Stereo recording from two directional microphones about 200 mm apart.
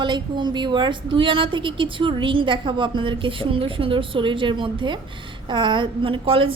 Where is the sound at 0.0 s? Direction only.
25° right (ahead or behind).